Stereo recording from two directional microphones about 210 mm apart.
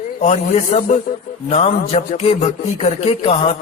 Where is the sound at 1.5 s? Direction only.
30° left (ahead or behind).